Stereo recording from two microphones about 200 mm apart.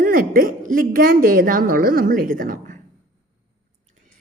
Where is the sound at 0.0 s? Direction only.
45° right (ahead or behind).